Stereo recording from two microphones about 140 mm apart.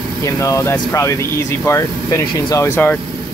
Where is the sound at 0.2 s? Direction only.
20° left (ahead or behind).